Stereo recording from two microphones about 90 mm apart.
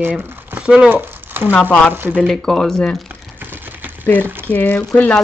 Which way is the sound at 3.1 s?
20° right (ahead or behind).